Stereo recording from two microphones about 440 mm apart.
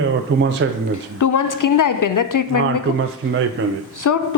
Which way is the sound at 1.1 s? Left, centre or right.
Left.